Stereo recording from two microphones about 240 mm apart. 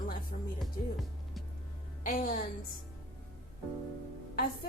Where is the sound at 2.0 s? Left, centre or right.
Left.